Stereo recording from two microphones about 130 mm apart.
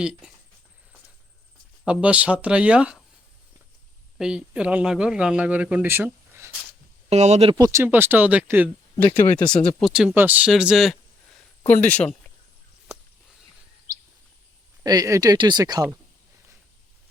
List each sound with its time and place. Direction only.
0.0 s speech: 5° right (ahead or behind)
1.8 s speech: 10° right (ahead or behind)
4.2 s speech: 5° right (ahead or behind)
7.1 s speech: 55° right (ahead or behind)
7.5 s speech: 20° right (ahead or behind)
9.0 s speech: 40° left (ahead or behind)
9.2 s speech: 10° left (ahead or behind)
9.8 s speech: 5° right (ahead or behind)
11.6 s speech: 15° left (ahead or behind)
14.8 s speech: 25° right (ahead or behind)